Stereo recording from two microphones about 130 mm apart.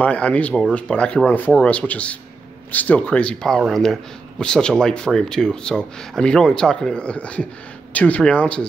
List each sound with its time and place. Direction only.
0.0 s speech: 10° left (ahead or behind)